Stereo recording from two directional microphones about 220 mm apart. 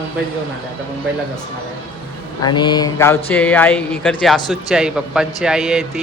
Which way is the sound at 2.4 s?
20° left (ahead or behind).